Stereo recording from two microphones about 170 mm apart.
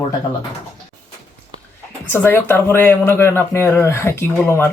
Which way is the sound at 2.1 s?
10° left (ahead or behind).